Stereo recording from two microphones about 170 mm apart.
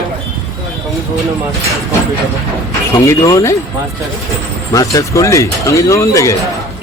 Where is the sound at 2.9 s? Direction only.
20° left (ahead or behind).